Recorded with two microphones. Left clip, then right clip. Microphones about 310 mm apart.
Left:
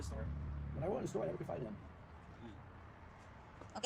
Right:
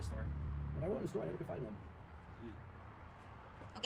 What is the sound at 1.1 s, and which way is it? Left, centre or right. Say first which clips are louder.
Speech: left 2 dB; centre.